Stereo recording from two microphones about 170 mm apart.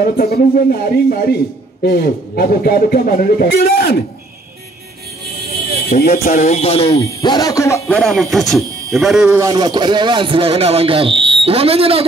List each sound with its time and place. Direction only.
0.0 s a man's voice: 60° left (ahead or behind)
6.0 s speech: 45° left (ahead or behind)
7.1 s a man's voice: 20° left (ahead or behind)
7.9 s speech: centre (ahead or behind)
9.3 s speech: 20° right (ahead or behind); by 12.1 s 35° right (ahead or behind)